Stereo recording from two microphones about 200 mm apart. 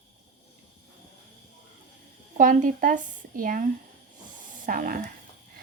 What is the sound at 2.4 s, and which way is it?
Speech, 40° right (ahead or behind).